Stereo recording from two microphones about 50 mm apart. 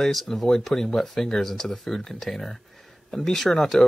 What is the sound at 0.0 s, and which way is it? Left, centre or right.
Speech, centre.